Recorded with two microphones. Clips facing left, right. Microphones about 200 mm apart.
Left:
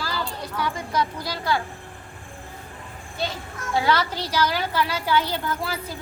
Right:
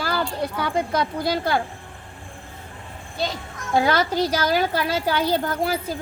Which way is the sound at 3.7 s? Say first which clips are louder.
Right 4 dB; 50° right (ahead or behind).